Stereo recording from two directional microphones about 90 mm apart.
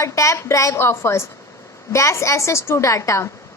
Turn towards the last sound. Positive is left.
turn(degrees=35)  # may be behind; listen again after turning